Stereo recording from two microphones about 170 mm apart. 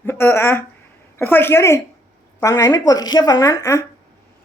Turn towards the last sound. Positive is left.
turn(degrees=20)  # may be behind; listen again after turning